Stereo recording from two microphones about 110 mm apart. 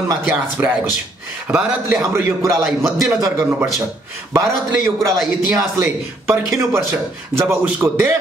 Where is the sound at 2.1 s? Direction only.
25° right (ahead or behind).